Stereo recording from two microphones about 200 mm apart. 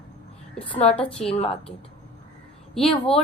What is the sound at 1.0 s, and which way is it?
Speech, 5° left (ahead or behind).